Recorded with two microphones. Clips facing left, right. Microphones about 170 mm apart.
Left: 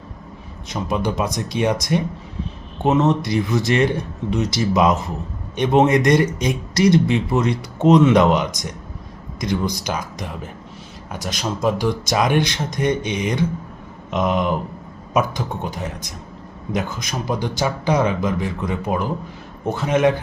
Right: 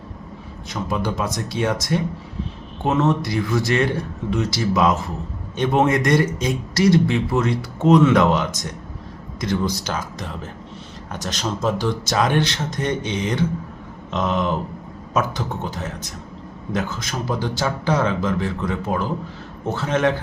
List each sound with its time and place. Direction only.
0.7 s speech: 20° left (ahead or behind)